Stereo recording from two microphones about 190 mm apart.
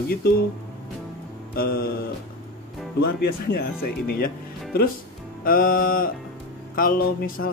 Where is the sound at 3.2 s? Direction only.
55° left (ahead or behind).